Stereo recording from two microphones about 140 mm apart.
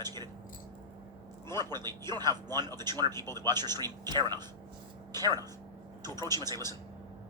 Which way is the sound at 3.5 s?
30° right (ahead or behind).